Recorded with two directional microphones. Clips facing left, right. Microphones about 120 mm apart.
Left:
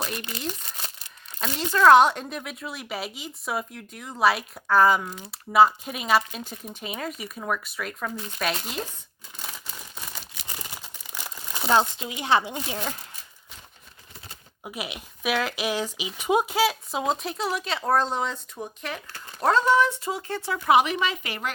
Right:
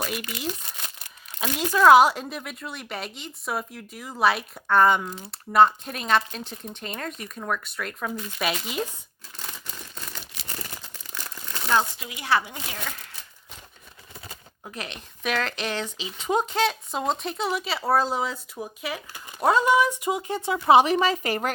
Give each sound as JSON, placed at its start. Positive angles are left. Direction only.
{"t": 1.4, "sound": "speech", "side_deg": -5}
{"t": 9.4, "sound": "a sound", "side_deg": 5}
{"t": 11.1, "sound": "speech", "side_deg": 15}
{"t": 14.6, "sound": "speech", "side_deg": 10}